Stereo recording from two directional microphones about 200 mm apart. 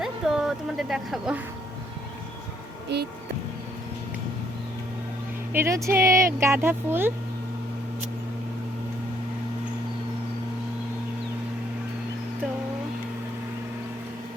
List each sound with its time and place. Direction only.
0.0 s speech: centre (ahead or behind)
2.9 s speech: 55° right (ahead or behind)
5.5 s speech: 15° right (ahead or behind)